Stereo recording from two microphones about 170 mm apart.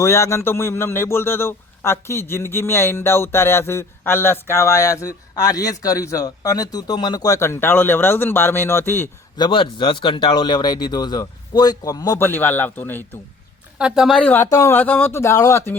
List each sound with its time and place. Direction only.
0.0 s a man's voice: 15° left (ahead or behind)
9.4 s speech: 30° left (ahead or behind); by 13.1 s 10° left (ahead or behind)
13.7 s a woman's voice: 5° right (ahead or behind); by 15.8 s 15° left (ahead or behind)